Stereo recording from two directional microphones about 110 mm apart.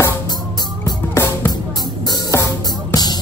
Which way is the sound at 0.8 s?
25° left (ahead or behind).